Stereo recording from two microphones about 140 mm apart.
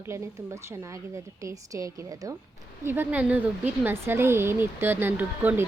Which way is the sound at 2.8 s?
15° right (ahead or behind).